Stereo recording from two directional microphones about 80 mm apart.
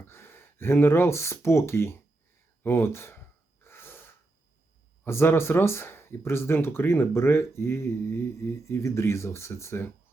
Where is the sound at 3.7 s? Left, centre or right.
Left.